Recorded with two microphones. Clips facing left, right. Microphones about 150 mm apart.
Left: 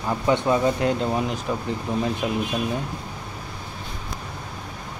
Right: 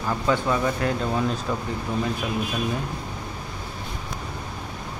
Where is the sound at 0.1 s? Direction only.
20° left (ahead or behind).